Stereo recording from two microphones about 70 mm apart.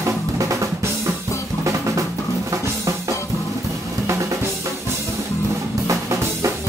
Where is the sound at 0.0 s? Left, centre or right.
Right.